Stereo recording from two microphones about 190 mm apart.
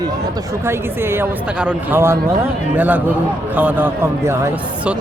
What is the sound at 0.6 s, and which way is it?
Speech, 10° right (ahead or behind).